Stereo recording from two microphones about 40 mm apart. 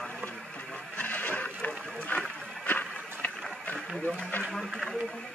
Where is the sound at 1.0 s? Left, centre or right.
Left.